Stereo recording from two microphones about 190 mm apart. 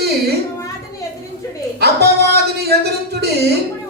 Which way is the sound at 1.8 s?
55° right (ahead or behind).